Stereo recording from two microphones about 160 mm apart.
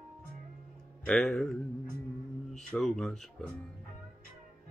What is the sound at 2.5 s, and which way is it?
Speech, centre (ahead or behind).